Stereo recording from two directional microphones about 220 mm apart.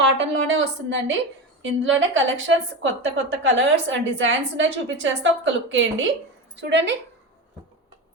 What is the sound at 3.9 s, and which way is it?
A woman's voice, 60° right (ahead or behind).